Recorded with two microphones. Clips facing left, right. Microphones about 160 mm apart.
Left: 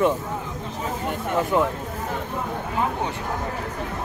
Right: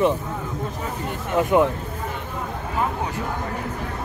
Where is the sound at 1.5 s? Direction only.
20° right (ahead or behind).